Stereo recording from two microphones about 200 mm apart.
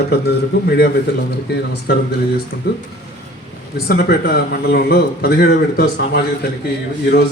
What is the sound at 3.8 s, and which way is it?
A man's voice, 50° left (ahead or behind).